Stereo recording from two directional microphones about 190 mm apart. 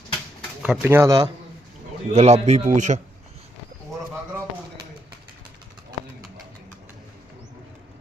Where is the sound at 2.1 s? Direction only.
35° right (ahead or behind).